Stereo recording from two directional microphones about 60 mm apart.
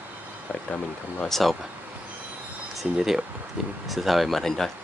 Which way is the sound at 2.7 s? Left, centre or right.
Centre.